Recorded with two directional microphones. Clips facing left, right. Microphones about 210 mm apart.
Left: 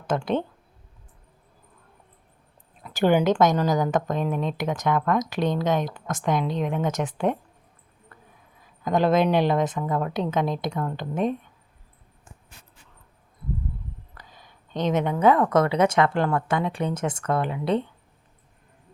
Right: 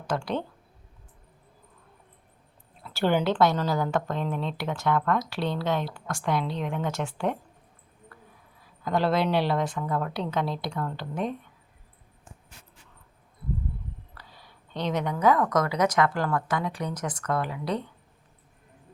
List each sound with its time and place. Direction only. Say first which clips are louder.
0.1 s a woman's voice: left 4 dB; 20° left (ahead or behind)
2.8 s a woman's voice: left 4 dB; 15° left (ahead or behind)
8.1 s a sound: even; 20° left (ahead or behind)
8.8 s a woman's voice: left 4 dB; 20° left (ahead or behind)
14.2 s a woman's voice: left 1 dB; 20° left (ahead or behind)